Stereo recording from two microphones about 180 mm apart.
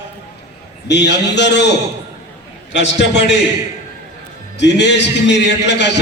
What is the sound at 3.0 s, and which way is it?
Speech, 70° left (ahead or behind).